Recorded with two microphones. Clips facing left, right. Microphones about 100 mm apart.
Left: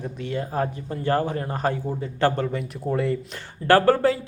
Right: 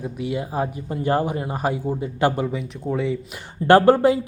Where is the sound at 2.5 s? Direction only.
Centre (ahead or behind).